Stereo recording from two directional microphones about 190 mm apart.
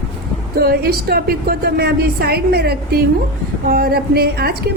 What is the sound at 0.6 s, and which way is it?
A woman's voice, 55° right (ahead or behind).